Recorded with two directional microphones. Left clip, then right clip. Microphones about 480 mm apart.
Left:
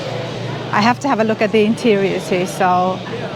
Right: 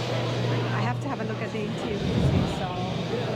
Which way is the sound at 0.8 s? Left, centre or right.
Left.